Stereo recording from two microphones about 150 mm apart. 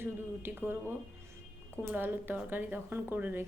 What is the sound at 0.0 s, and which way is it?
Speech, 15° right (ahead or behind).